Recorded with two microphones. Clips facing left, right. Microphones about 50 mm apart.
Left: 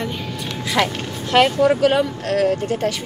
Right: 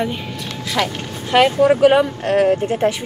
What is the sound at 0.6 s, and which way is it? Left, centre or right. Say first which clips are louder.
Speech: left 1 dB; centre.